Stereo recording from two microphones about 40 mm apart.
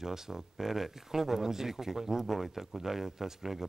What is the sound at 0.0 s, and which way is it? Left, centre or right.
Speech, centre.